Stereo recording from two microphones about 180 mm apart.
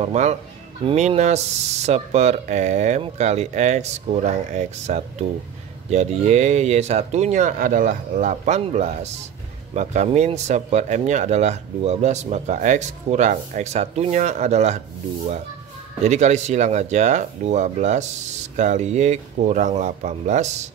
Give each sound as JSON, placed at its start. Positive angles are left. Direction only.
{"t": 0.0, "sound": "speech", "side_deg": -40}
{"t": 16.0, "sound": "speech", "side_deg": -40}